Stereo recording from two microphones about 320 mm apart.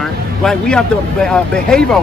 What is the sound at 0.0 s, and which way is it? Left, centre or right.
Speech, centre.